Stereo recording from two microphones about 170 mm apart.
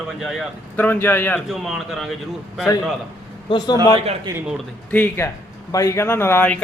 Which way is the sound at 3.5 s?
25° left (ahead or behind).